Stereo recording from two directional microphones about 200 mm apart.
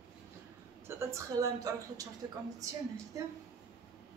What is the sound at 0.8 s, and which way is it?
Speech, 15° right (ahead or behind).